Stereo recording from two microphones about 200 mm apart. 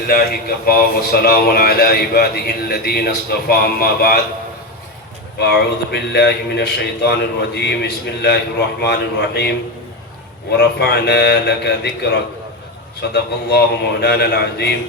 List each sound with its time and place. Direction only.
0.1 s speech: 45° left (ahead or behind)
5.4 s a man's voice: 55° left (ahead or behind)
10.5 s a man's voice: 55° left (ahead or behind)